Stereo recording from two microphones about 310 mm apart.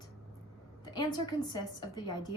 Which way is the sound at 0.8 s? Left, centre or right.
Centre.